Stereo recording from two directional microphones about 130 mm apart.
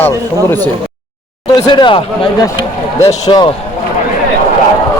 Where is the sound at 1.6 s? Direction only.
40° left (ahead or behind).